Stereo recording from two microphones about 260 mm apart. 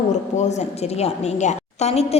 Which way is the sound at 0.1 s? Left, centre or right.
Left.